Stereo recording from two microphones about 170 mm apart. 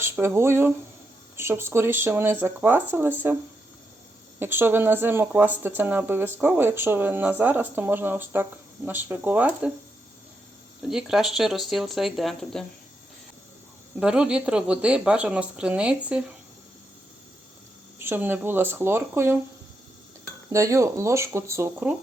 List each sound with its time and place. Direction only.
0.0 s speech: 15° right (ahead or behind)
4.4 s speech: 10° right (ahead or behind)
10.8 s speech: centre (ahead or behind)
14.0 s speech: 5° right (ahead or behind)
18.0 s speech: 10° right (ahead or behind)
20.5 s speech: 20° right (ahead or behind)